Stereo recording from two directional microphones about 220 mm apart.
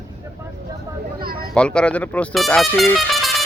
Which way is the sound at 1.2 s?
40° right (ahead or behind).